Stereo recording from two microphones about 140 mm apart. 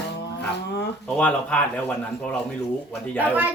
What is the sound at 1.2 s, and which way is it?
Speech, 10° left (ahead or behind).